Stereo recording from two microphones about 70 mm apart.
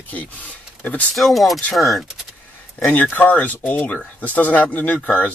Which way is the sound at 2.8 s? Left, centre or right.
Left.